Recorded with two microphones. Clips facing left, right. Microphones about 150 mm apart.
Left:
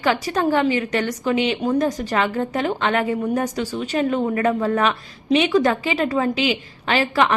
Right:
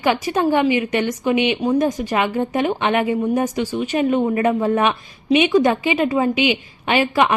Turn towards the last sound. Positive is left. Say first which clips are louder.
# right 2 dB
turn(degrees=-15)  # may be behind; listen again after turning